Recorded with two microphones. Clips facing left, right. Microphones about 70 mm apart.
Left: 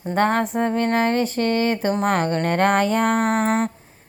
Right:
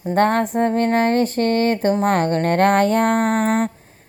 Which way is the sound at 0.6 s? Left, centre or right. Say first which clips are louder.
Right 3 dB; right.